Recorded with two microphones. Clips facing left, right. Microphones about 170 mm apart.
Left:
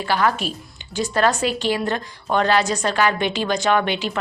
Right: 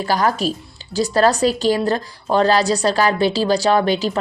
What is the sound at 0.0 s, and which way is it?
Speech, 40° right (ahead or behind).